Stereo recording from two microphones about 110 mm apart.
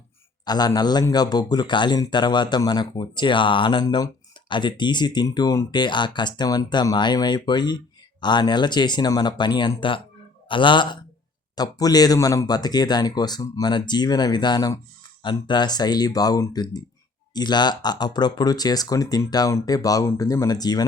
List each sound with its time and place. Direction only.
0.4 s a man's voice: 40° left (ahead or behind)
11.5 s a man's voice: 35° left (ahead or behind)